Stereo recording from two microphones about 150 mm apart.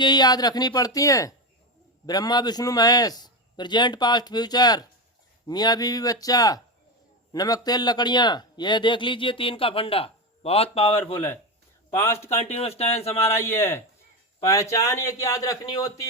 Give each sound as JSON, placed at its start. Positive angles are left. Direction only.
{"t": 0.0, "sound": "a man's voice", "side_deg": 30}
{"t": 11.9, "sound": "a man's voice", "side_deg": 15}
{"t": 12.4, "sound": "speech", "side_deg": 40}
{"t": 13.1, "sound": "a man's voice", "side_deg": 15}